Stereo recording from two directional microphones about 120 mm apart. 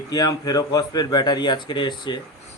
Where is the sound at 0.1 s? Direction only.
35° left (ahead or behind).